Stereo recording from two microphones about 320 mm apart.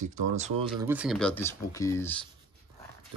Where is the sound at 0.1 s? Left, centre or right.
Right.